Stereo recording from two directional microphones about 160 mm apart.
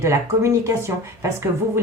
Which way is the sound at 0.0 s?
20° right (ahead or behind).